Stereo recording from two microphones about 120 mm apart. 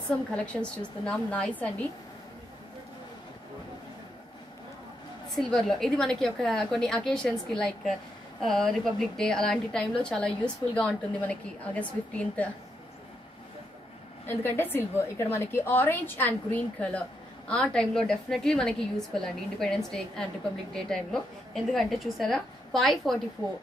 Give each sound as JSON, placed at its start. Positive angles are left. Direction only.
{"t": 0.3, "sound": "a woman's voice", "side_deg": 10}
{"t": 5.4, "sound": "a woman's voice", "side_deg": 5}
{"t": 14.2, "sound": "a woman's voice", "side_deg": 20}